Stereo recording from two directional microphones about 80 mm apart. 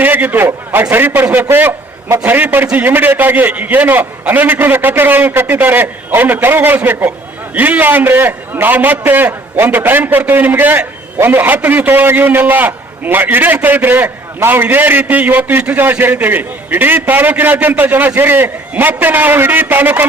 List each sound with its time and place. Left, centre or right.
0.0 s a man's voice: right